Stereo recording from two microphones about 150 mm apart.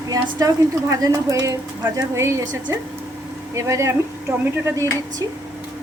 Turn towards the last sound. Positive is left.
turn(degrees=-20)  # may be behind; listen again after turning